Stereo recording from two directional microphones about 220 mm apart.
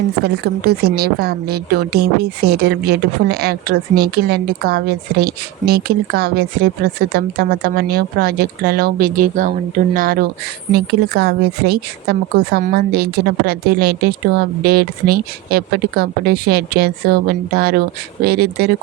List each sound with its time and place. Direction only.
0.3 s speech: 45° right (ahead or behind)